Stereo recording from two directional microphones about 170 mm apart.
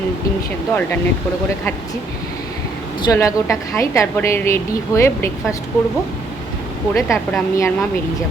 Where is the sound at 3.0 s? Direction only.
20° left (ahead or behind).